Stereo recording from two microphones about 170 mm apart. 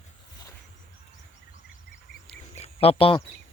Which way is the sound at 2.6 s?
35° left (ahead or behind).